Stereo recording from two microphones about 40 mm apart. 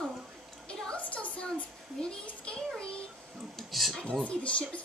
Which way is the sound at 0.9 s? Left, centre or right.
Left.